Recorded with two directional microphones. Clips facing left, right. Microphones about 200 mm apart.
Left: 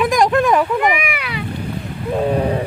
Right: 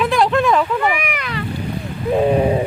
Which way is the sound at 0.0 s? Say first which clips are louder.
Left 1 dB; 15° left (ahead or behind).